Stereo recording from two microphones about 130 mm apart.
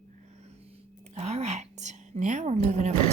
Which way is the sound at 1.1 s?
60° right (ahead or behind).